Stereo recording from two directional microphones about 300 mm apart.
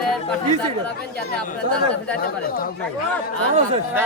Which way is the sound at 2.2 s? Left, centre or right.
Left.